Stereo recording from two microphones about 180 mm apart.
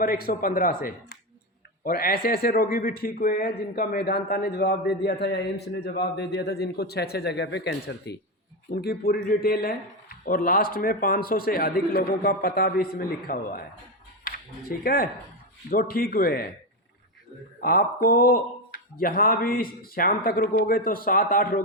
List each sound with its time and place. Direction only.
0.0 s a man's voice: 55° left (ahead or behind)
8.7 s speech: 55° left (ahead or behind)
17.6 s a man's voice: 55° left (ahead or behind)